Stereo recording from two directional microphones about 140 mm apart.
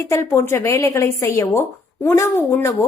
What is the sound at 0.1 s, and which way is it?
A woman's voice, 20° left (ahead or behind).